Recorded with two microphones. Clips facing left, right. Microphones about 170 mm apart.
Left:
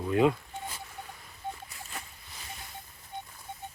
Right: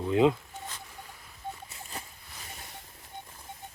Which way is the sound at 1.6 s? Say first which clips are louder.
Right 1 dB; 25° right (ahead or behind).